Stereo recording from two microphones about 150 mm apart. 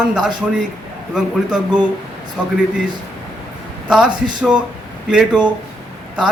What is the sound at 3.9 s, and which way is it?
Speech, 5° right (ahead or behind).